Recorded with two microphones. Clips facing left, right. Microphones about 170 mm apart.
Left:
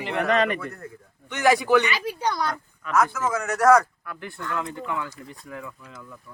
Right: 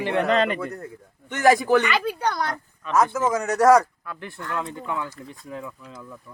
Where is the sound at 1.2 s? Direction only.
45° right (ahead or behind).